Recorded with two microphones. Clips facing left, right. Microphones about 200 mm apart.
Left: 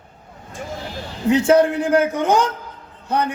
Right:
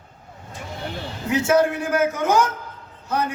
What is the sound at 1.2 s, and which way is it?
Speech, 30° left (ahead or behind).